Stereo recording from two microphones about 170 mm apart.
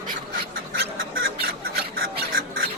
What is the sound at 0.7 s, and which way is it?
Bird, 65° right (ahead or behind).